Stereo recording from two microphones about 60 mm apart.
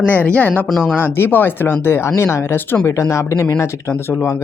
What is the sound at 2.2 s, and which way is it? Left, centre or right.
Speech, left.